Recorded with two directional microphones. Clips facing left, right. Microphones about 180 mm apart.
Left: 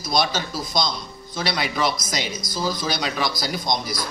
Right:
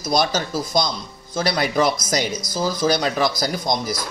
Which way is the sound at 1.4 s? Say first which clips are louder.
Right 5 dB; 45° right (ahead or behind).